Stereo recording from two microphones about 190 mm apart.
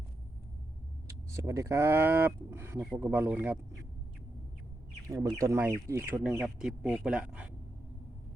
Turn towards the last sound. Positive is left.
turn(degrees=-5)  # may be behind; listen again after turning